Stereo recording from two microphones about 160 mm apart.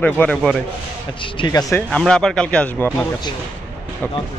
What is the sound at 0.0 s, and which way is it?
Speech, 5° left (ahead or behind).